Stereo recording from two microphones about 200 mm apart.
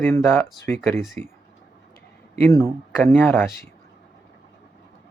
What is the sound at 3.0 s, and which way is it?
Speech, 10° left (ahead or behind).